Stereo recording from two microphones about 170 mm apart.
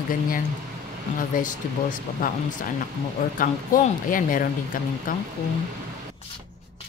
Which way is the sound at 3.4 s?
50° left (ahead or behind).